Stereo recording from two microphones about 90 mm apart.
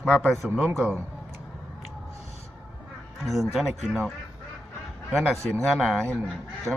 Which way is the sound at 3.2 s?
Centre (ahead or behind).